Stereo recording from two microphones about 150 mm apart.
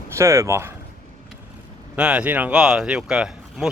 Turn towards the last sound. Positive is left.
turn(degrees=-5)  # may be behind; listen again after turning